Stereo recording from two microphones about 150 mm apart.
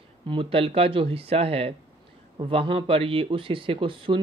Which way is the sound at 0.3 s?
35° right (ahead or behind).